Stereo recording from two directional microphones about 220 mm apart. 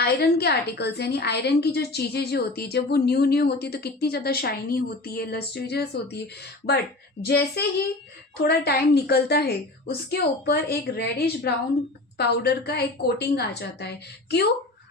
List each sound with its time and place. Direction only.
0.0 s a woman's voice: 45° left (ahead or behind)